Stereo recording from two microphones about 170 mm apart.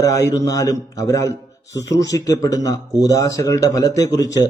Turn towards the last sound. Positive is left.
turn(degrees=20)  # may be behind; listen again after turning